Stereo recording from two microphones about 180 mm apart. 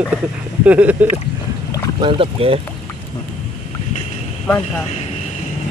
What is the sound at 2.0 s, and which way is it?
Speech, 30° right (ahead or behind).